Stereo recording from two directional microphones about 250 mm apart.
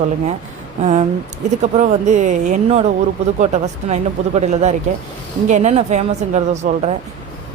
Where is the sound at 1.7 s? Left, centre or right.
Right.